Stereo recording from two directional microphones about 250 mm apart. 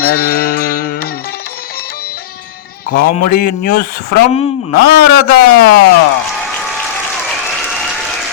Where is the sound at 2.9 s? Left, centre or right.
Left.